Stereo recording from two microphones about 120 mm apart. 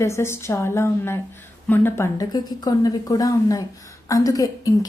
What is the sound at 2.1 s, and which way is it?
Speech, 35° left (ahead or behind).